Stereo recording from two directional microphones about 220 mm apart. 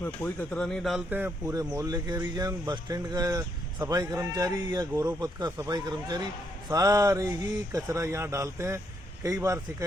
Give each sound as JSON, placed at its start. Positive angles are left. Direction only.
{"t": 0.0, "sound": "speech", "side_deg": 10}